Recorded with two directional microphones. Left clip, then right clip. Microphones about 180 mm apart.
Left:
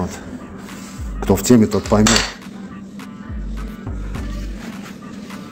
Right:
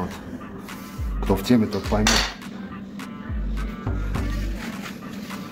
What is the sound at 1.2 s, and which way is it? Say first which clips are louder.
Speech: left 7 dB; 50° left (ahead or behind).